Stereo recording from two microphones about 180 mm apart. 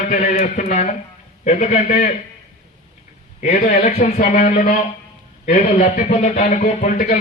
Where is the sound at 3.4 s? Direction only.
40° left (ahead or behind).